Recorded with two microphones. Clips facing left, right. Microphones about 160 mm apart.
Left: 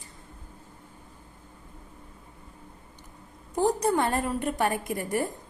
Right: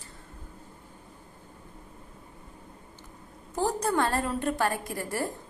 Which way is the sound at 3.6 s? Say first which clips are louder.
Left 3 dB; 15° left (ahead or behind).